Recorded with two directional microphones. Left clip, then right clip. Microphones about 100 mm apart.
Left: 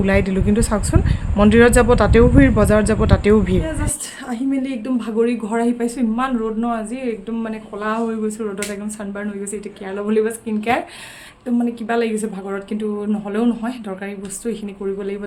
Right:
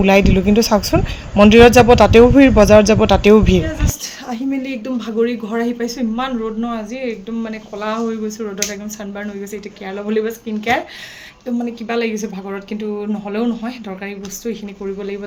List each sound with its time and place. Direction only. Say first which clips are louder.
0.0 s speech: right 6 dB; 30° right (ahead or behind)
4.3 s speech: even; 10° left (ahead or behind)
9.9 s speech: left 1 dB; 25° left (ahead or behind)